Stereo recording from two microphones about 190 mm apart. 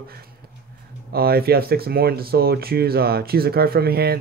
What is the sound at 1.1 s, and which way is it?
Speech, 55° right (ahead or behind).